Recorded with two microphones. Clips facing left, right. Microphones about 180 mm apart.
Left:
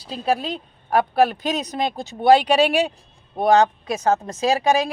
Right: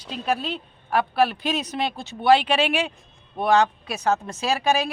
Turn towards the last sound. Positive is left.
turn(degrees=40)  # may be behind; listen again after turning